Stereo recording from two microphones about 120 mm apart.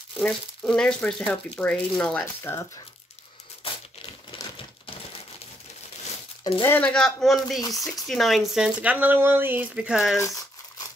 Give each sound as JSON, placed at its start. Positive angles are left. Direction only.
{"t": 0.2, "sound": "speech", "side_deg": 5}
{"t": 2.5, "sound": "speech", "side_deg": 20}
{"t": 3.6, "sound": "crumpling", "side_deg": 50}
{"t": 6.6, "sound": "speech", "side_deg": 15}
{"t": 9.8, "sound": "speech", "side_deg": -5}
{"t": 10.1, "sound": "speech", "side_deg": 25}